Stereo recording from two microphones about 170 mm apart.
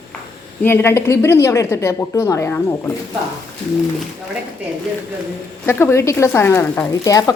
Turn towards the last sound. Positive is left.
turn(degrees=20)  # may be behind; listen again after turning